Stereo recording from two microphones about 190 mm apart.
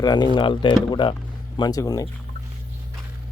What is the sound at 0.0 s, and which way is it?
Speech, 20° left (ahead or behind).